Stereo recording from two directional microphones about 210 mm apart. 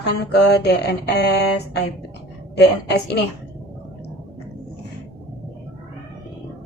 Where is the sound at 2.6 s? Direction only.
50° left (ahead or behind).